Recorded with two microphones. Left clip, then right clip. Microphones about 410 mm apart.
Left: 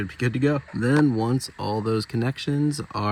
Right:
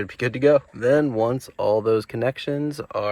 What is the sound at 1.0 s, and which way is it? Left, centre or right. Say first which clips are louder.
Speech: right 1 dB; right.